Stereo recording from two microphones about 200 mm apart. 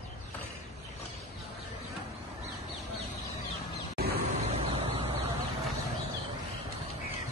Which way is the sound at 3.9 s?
50° right (ahead or behind).